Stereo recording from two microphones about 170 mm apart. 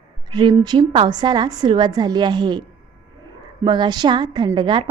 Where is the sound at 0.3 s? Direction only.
25° right (ahead or behind).